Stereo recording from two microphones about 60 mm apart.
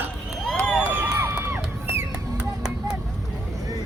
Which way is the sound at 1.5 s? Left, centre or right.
Right.